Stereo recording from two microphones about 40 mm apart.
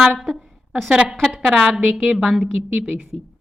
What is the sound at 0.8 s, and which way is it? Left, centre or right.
A woman's voice, centre.